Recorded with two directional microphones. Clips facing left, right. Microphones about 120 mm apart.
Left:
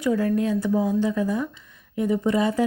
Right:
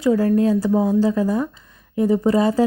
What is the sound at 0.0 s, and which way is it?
Speech, 30° right (ahead or behind).